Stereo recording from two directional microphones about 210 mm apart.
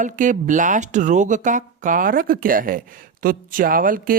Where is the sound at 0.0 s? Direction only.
35° right (ahead or behind).